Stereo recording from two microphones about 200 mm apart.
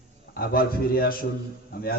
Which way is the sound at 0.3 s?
45° left (ahead or behind).